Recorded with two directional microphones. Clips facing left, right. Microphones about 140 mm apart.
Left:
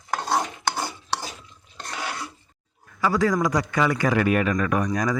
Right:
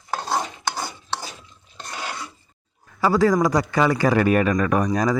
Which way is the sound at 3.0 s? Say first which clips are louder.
Right 4 dB; 30° right (ahead or behind).